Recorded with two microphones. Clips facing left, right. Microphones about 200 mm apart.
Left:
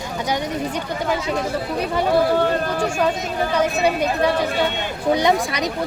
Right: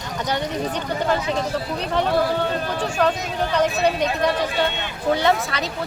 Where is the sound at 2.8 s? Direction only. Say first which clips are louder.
Left 1 dB; 10° left (ahead or behind).